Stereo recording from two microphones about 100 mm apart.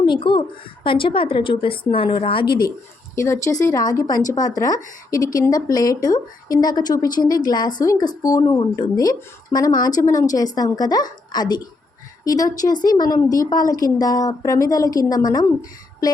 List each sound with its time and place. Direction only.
0.0 s a woman's voice: 50° left (ahead or behind)
3.2 s speech: 30° left (ahead or behind)